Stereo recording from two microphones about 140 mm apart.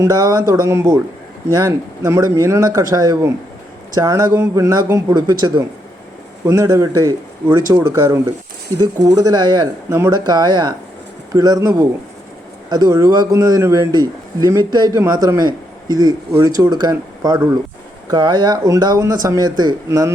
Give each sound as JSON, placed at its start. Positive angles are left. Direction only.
{"t": 0.0, "sound": "a man's voice", "side_deg": -25}
{"t": 5.1, "sound": "a man's voice", "side_deg": -30}